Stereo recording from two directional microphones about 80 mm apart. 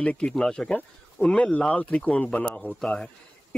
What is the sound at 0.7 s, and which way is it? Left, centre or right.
Speech, centre.